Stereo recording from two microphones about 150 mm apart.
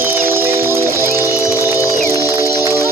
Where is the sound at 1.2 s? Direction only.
20° left (ahead or behind).